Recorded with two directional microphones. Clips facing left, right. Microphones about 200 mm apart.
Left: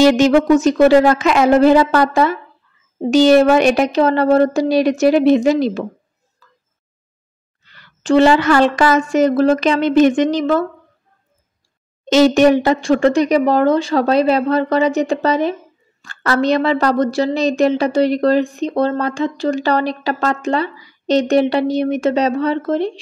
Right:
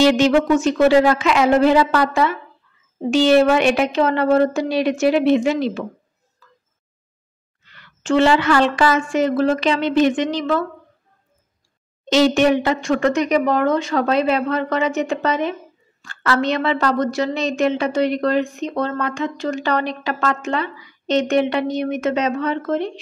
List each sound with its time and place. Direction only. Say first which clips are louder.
0.0 s a woman's voice: left 3 dB; 45° left (ahead or behind)
7.6 s a woman's voice: left 4 dB; 35° left (ahead or behind)
12.1 s a woman's voice: left 4 dB; 45° left (ahead or behind)